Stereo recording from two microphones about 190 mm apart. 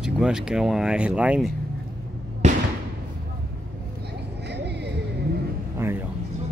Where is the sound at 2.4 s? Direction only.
35° right (ahead or behind).